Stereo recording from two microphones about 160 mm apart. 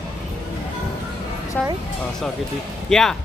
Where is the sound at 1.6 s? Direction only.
5° left (ahead or behind).